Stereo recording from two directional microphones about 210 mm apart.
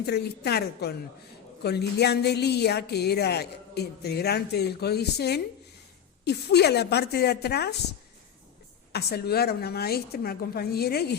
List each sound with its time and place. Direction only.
0.0 s a woman's voice: 50° left (ahead or behind)
8.9 s a woman's voice: 50° left (ahead or behind)